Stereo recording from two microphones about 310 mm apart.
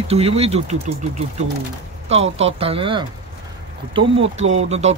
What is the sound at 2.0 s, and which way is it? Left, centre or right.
Speech, centre.